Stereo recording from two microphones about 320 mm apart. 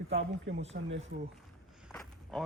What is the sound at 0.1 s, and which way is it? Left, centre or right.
Speech, right.